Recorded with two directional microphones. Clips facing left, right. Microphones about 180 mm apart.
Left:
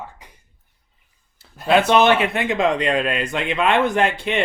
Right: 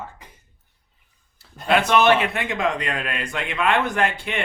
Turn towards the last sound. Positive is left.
turn(degrees=25)  # may be behind; listen again after turning